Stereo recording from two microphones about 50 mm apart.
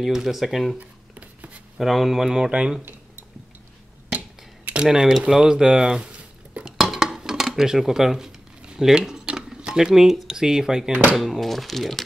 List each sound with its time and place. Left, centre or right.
0.0 s speech: centre
0.7 s writing: right
1.8 s speech: centre
4.8 s speech: centre
6.8 s dishes: centre
9.5 s speech: centre
10.9 s speech: right
11.1 s speech: centre